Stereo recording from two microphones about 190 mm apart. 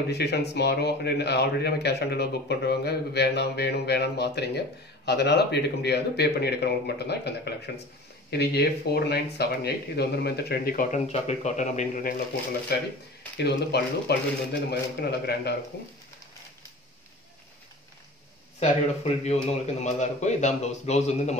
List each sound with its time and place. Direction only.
0.1 s a man's voice: 60° left (ahead or behind); by 12.2 s 45° left (ahead or behind)
12.7 s a man's voice: 60° left (ahead or behind)
19.2 s a man's voice: 35° left (ahead or behind)